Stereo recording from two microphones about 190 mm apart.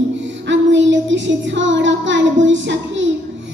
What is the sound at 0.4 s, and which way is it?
Child singing, 75° right (ahead or behind).